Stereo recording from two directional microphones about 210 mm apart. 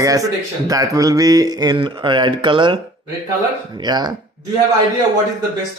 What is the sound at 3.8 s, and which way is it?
Speech, 20° right (ahead or behind).